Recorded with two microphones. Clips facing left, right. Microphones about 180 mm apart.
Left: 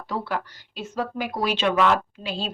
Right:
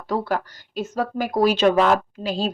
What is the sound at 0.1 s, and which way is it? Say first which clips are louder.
Speech: right 5 dB; 40° right (ahead or behind).